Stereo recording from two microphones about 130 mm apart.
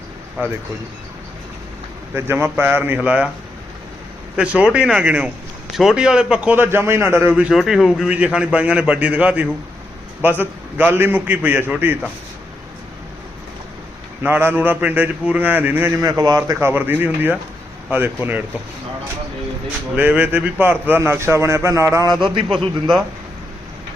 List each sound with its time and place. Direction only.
0.4 s a man's voice: 15° right (ahead or behind)
2.1 s a man's voice: 20° right (ahead or behind)
4.4 s a man's voice: 10° right (ahead or behind)
7.5 s a man's voice: centre (ahead or behind)
14.2 s a man's voice: 15° right (ahead or behind)
20.0 s speech: 10° right (ahead or behind); by 22.4 s 35° right (ahead or behind)
22.4 s a man's voice: 5° right (ahead or behind)